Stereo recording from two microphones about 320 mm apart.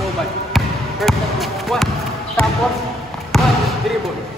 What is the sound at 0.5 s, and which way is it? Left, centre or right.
Basketball bounce, centre.